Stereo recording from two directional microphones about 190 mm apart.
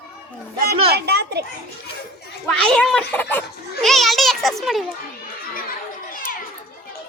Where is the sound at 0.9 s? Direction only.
60° right (ahead or behind).